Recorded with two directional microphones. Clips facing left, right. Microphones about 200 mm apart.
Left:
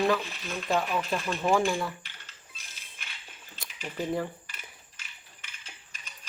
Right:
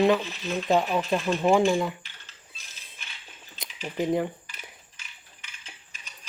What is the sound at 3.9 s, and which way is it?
Cutlery, 15° right (ahead or behind).